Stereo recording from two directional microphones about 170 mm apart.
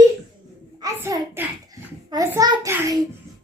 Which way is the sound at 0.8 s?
15° right (ahead or behind).